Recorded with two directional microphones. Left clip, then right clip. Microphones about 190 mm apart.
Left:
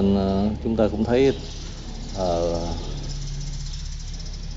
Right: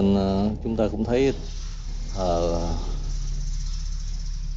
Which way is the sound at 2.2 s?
20° right (ahead or behind).